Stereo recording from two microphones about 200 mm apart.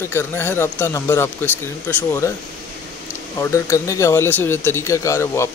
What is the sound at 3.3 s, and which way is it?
Speech, 15° left (ahead or behind).